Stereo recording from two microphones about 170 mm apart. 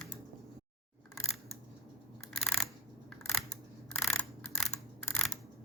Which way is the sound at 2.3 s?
Centre (ahead or behind).